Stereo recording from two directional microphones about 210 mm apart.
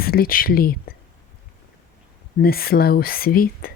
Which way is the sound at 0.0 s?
45° left (ahead or behind).